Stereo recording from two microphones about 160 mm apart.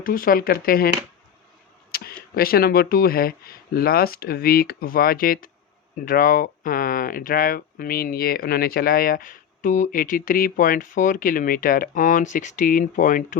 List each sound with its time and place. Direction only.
0.0 s speech: 60° left (ahead or behind)
1.9 s speech: 70° left (ahead or behind)